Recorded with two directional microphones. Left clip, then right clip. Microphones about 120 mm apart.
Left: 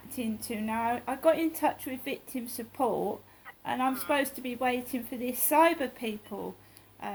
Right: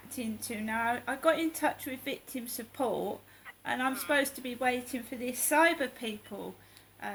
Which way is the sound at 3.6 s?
45° right (ahead or behind).